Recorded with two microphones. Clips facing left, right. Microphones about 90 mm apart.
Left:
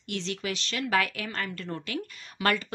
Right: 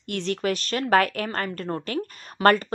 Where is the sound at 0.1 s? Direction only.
50° right (ahead or behind).